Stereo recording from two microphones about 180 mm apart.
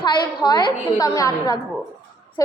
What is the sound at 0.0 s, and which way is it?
A woman's voice, 25° left (ahead or behind).